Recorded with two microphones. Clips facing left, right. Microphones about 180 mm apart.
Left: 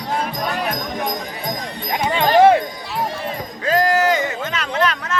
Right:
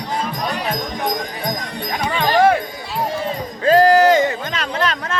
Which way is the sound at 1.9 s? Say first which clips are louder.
Left 3 dB; 20° left (ahead or behind).